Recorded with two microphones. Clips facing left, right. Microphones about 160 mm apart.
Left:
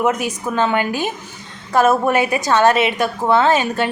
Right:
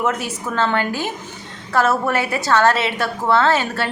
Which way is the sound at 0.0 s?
15° left (ahead or behind).